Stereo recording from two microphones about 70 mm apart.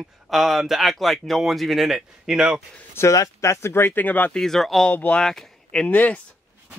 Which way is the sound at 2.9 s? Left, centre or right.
Left.